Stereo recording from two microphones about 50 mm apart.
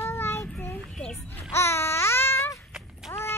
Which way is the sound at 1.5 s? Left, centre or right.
Left.